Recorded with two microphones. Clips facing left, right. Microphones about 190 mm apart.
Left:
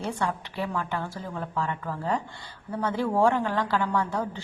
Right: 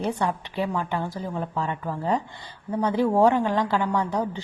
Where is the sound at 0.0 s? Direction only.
20° right (ahead or behind).